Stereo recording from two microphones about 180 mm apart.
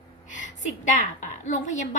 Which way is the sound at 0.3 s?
45° left (ahead or behind).